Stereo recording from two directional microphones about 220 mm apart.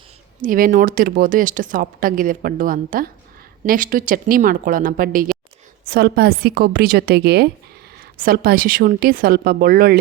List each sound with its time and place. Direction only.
0.4 s speech: 40° right (ahead or behind)